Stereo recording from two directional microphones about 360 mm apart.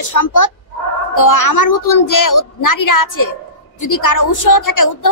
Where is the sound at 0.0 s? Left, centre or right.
Left.